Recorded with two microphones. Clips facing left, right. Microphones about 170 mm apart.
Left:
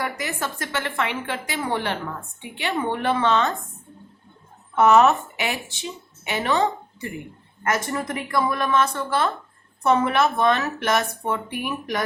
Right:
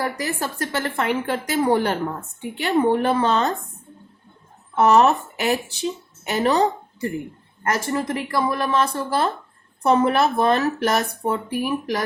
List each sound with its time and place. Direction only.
0.0 s speech: 35° right (ahead or behind)
4.8 s speech: 35° right (ahead or behind)